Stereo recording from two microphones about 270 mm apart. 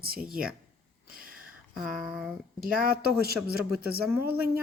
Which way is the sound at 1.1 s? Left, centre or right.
Right.